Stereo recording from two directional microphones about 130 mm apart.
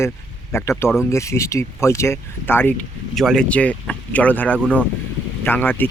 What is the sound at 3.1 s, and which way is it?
Speech, 5° left (ahead or behind).